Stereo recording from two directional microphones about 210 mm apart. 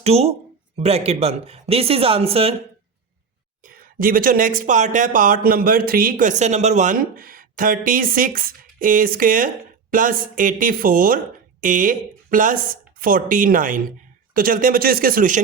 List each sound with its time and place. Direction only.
0.0 s speech: 30° right (ahead or behind)
3.6 s speech: 40° right (ahead or behind)